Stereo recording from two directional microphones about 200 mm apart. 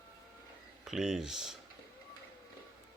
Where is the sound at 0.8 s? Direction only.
Centre (ahead or behind).